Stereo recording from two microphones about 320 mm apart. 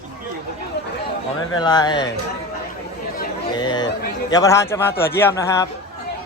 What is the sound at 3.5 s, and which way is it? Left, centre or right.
Speech, centre.